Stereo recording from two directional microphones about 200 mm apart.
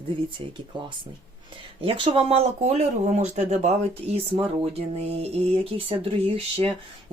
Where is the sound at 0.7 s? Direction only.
25° right (ahead or behind).